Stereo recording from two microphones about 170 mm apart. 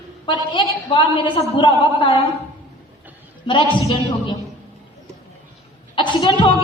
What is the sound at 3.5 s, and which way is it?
Speech, 30° left (ahead or behind).